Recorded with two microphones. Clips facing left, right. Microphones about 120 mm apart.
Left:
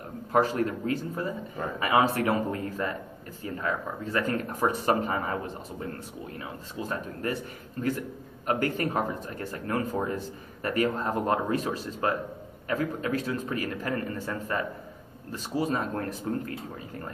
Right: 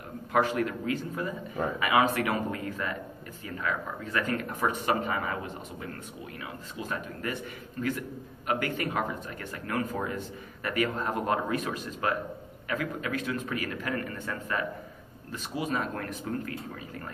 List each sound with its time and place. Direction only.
0.3 s a man's voice: 35° left (ahead or behind)